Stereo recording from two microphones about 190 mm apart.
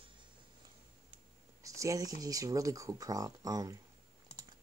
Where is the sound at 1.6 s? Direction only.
15° right (ahead or behind).